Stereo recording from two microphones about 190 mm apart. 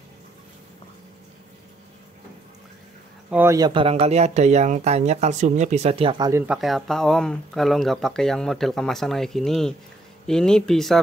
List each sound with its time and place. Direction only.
3.3 s speech: 10° right (ahead or behind)
6.4 s speech: 5° right (ahead or behind)